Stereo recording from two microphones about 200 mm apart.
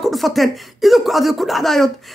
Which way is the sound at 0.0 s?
Centre (ahead or behind).